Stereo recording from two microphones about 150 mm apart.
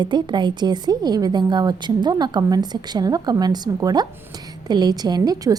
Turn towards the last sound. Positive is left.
turn(degrees=-25)  # may be behind; listen again after turning